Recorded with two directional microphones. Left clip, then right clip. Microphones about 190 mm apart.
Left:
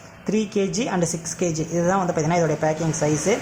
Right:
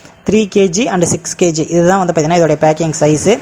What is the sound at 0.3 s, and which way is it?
A woman's voice, 35° right (ahead or behind).